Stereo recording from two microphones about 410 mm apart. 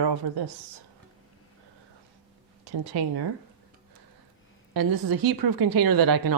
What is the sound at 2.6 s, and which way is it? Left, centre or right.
Speech, right.